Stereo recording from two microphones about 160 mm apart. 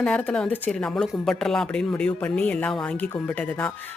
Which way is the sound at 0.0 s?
5° left (ahead or behind).